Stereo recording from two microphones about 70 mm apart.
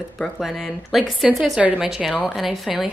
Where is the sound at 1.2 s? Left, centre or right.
Centre.